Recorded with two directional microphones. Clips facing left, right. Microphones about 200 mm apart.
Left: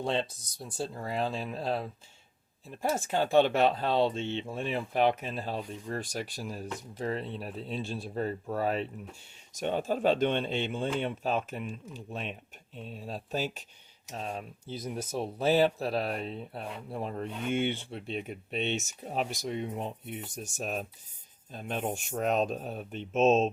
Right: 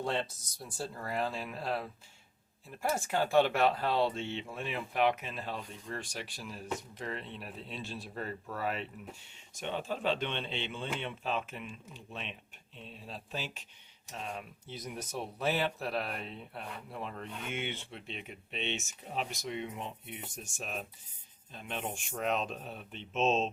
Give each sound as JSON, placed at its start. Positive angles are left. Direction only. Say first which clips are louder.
{"t": 0.0, "sound": "speech", "louder": "left 3 dB", "side_deg": 20}